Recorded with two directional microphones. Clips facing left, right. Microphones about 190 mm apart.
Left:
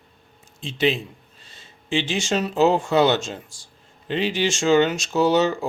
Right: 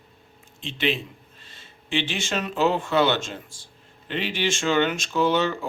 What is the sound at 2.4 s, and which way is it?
Speech, 40° left (ahead or behind).